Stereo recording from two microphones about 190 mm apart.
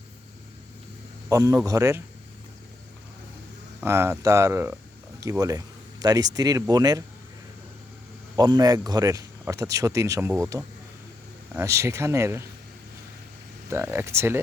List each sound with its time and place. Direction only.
1.3 s speech: 15° right (ahead or behind)
3.8 s speech: 10° right (ahead or behind)
8.4 s speech: 20° right (ahead or behind)
13.7 s speech: 10° right (ahead or behind)